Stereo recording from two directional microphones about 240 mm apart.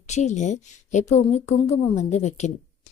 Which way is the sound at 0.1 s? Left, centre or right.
Left.